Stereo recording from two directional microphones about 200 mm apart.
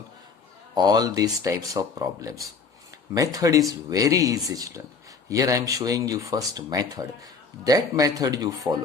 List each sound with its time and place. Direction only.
0.7 s speech: 20° right (ahead or behind)